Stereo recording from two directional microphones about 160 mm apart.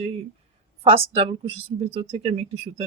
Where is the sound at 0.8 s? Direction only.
35° right (ahead or behind).